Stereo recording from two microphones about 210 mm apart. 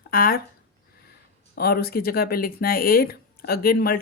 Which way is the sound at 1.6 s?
45° left (ahead or behind).